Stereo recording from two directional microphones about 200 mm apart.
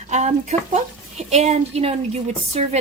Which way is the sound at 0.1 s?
35° right (ahead or behind).